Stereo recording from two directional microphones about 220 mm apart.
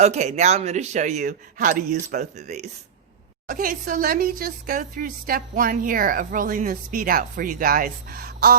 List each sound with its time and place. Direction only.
0.0 s speech: 30° right (ahead or behind)